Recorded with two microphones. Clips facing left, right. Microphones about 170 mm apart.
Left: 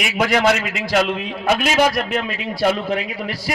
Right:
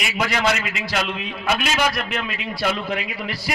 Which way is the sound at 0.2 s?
50° left (ahead or behind).